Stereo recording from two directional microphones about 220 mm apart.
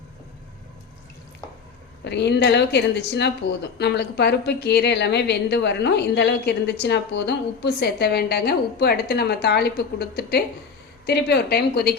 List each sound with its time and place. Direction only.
2.0 s a woman's voice: 50° left (ahead or behind)